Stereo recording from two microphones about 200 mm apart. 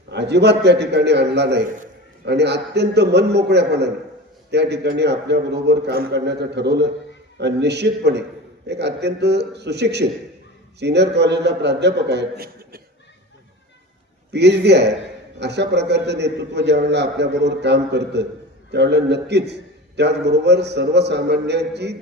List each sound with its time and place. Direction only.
0.1 s a man's voice: 60° right (ahead or behind)
14.3 s a man's voice: 55° right (ahead or behind)